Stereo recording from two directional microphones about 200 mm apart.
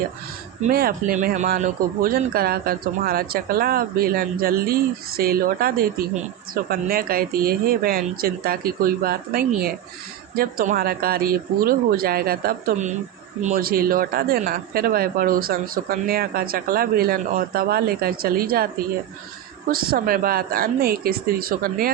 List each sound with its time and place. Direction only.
0.7 s speech: 45° right (ahead or behind)